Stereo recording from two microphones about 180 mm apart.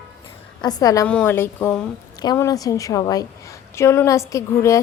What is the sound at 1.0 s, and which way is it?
Speech, 10° left (ahead or behind).